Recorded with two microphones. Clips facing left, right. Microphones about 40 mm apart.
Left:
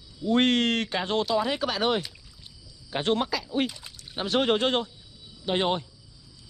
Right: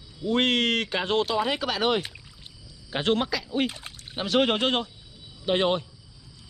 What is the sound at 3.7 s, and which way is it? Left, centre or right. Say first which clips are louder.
Speech: right 4 dB; right.